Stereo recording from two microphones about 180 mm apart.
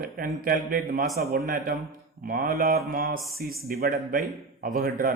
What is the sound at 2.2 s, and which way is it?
Speech, 50° right (ahead or behind).